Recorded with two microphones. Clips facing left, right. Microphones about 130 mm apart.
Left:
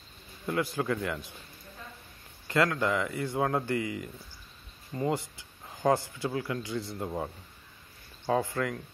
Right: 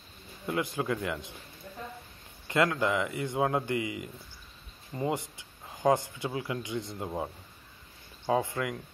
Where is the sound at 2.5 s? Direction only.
20° right (ahead or behind).